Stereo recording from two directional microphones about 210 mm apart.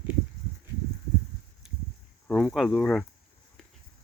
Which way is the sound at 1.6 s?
Centre (ahead or behind).